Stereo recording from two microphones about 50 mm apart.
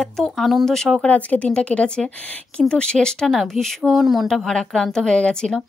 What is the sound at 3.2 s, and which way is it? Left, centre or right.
Speech, centre.